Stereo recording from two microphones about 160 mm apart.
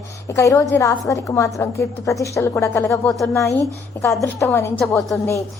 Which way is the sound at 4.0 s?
20° left (ahead or behind).